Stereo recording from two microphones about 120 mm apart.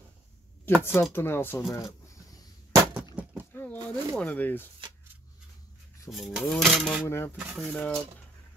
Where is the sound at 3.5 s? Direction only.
15° left (ahead or behind).